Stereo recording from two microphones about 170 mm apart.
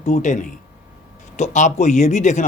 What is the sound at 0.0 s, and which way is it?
Speech, 45° left (ahead or behind).